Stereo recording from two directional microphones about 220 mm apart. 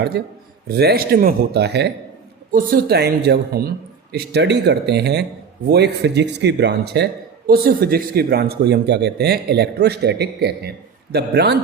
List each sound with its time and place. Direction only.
0.1 s speech: 50° right (ahead or behind)